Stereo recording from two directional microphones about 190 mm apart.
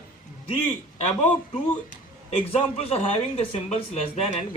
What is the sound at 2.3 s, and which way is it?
A man's voice, 35° left (ahead or behind).